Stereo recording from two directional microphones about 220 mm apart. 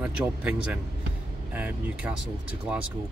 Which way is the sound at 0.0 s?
5° right (ahead or behind).